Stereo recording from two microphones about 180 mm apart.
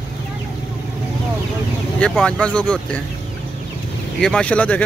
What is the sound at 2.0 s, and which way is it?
Speech, 5° left (ahead or behind).